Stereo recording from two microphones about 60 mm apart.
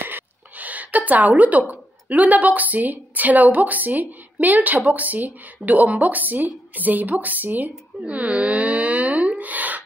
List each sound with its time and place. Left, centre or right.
0.0 s a woman's voice: right
8.0 s wail: right